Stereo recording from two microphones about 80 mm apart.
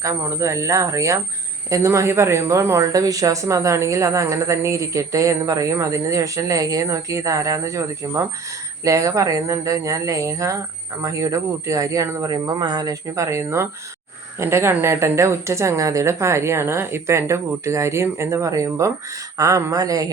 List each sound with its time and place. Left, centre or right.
0.0 s a woman's voice: right